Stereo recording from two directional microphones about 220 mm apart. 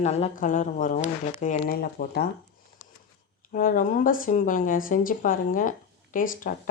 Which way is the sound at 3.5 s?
40° left (ahead or behind).